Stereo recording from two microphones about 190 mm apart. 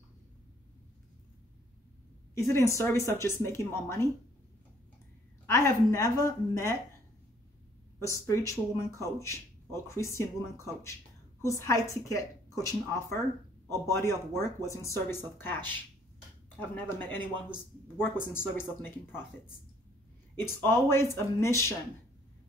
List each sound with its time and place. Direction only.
2.3 s speech: 15° left (ahead or behind)
5.5 s speech: 15° left (ahead or behind)
8.0 s speech: 15° left (ahead or behind)
20.6 s speech: 15° left (ahead or behind)